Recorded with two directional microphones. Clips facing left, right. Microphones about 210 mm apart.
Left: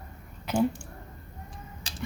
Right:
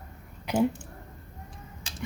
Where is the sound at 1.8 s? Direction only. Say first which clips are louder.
Right 1 dB; 35° left (ahead or behind).